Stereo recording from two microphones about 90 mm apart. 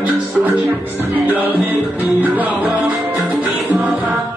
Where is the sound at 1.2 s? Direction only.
20° right (ahead or behind).